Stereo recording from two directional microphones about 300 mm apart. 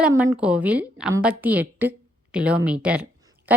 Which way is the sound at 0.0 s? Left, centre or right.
Centre.